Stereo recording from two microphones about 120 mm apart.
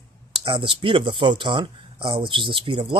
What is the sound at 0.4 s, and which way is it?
Speech, 45° right (ahead or behind).